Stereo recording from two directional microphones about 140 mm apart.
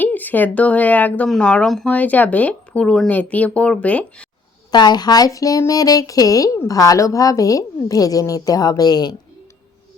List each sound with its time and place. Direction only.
0.0 s speech: 10° left (ahead or behind)
4.7 s speech: 30° left (ahead or behind)